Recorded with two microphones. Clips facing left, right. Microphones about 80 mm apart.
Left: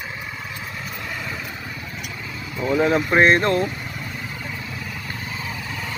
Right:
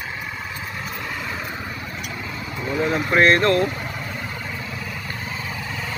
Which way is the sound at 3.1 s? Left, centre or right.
Centre.